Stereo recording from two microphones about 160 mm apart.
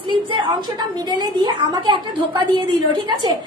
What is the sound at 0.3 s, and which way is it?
A woman's voice, 30° right (ahead or behind).